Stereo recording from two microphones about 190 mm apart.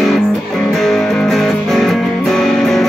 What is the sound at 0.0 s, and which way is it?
Music, centre (ahead or behind).